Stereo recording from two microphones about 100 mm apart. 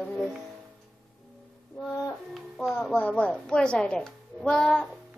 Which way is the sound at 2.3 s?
Centre (ahead or behind).